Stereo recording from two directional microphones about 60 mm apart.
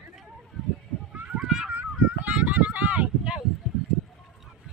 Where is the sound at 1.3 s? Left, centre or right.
Centre.